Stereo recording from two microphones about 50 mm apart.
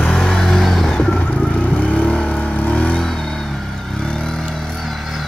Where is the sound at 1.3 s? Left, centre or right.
Left.